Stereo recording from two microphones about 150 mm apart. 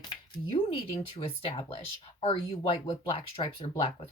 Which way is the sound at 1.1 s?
40° left (ahead or behind).